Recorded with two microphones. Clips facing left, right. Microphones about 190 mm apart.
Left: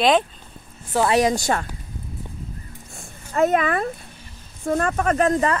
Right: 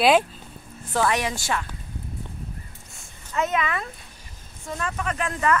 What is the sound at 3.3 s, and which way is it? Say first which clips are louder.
A woman's voice: left 6 dB; 45° left (ahead or behind).